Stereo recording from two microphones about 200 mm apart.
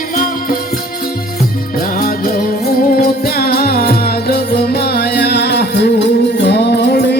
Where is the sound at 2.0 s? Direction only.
45° left (ahead or behind).